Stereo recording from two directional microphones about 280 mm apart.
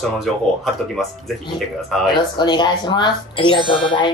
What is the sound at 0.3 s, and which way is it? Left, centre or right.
Speech, centre.